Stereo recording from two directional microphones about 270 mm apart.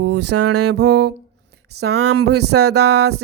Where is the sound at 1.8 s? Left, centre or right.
Right.